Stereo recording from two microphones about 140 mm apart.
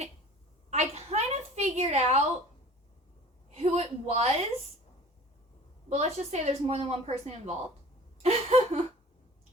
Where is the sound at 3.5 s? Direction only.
50° right (ahead or behind).